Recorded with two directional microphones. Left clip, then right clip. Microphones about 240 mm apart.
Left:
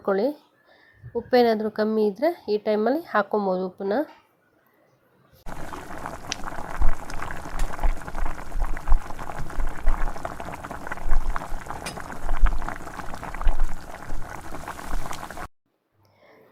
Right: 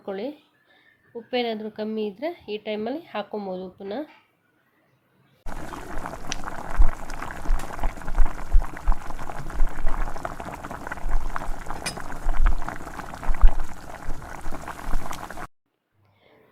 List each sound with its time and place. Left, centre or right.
0.0 s speech: left
5.5 s pour: centre